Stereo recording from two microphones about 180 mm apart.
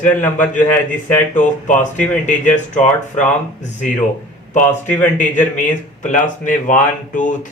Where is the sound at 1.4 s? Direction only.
45° left (ahead or behind).